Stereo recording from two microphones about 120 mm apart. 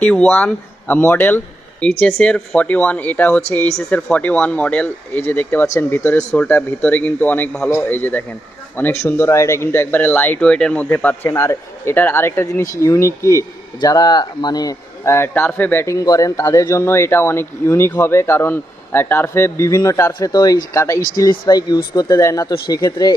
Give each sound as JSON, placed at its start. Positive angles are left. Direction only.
{"t": 0.0, "sound": "speech", "side_deg": 10}
{"t": 13.8, "sound": "speech", "side_deg": 35}